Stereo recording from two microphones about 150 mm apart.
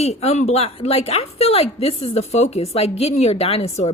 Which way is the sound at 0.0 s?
45° left (ahead or behind).